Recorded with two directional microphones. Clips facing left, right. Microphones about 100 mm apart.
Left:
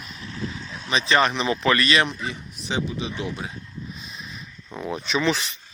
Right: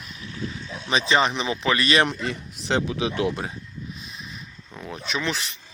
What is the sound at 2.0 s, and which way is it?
Speech, 75° right (ahead or behind).